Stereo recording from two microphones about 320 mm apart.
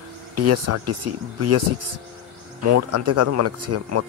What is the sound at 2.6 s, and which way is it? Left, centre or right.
Speech, right.